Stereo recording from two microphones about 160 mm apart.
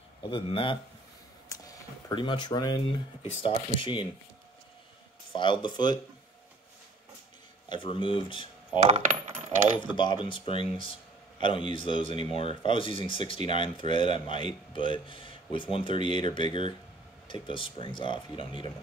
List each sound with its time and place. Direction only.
0.2 s speech: 30° left (ahead or behind)
1.5 s a sound: 20° left (ahead or behind)
3.4 s speech: 30° left (ahead or behind)
5.3 s speech: 30° left (ahead or behind)
7.7 s speech: 30° left (ahead or behind)
8.7 s coin: 40° right (ahead or behind)
9.8 s speech: 30° left (ahead or behind)